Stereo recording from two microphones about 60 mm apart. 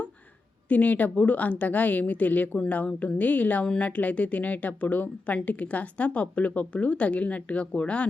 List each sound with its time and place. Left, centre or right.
0.7 s speech: left